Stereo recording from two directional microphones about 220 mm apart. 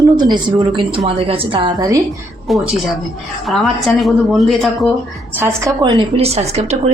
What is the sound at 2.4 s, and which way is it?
Speech, centre (ahead or behind).